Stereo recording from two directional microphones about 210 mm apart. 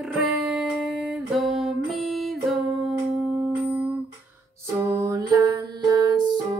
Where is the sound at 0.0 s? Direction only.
Centre (ahead or behind).